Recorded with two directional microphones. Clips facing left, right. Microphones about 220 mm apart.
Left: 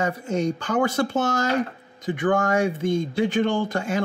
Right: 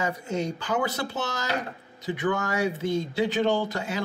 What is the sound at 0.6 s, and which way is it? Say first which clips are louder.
Speech: left 6 dB; 50° left (ahead or behind).